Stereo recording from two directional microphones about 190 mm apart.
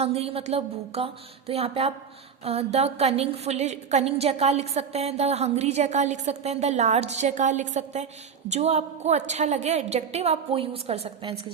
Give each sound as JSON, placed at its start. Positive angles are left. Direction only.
{"t": 0.0, "sound": "a woman's voice", "side_deg": -30}